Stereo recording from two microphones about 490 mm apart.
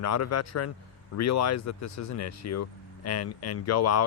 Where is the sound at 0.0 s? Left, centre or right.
Left.